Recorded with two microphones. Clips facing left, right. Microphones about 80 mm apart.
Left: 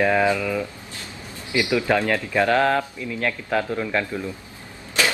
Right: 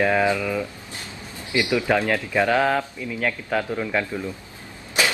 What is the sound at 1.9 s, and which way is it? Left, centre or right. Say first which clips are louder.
Speech: even; centre.